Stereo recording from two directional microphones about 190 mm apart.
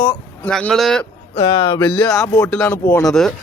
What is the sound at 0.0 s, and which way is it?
Speech, 5° left (ahead or behind).